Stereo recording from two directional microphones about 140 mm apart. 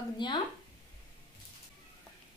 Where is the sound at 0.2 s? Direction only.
35° left (ahead or behind).